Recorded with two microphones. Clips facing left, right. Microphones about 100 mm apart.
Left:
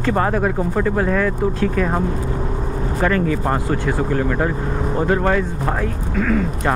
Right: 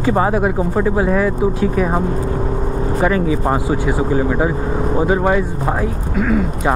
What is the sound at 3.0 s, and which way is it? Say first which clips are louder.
Speech: right 2 dB; 10° right (ahead or behind).